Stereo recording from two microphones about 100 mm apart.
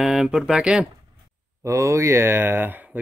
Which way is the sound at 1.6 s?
30° right (ahead or behind).